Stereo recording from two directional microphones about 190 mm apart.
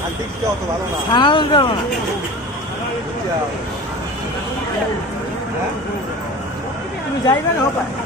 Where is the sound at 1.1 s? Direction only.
25° left (ahead or behind).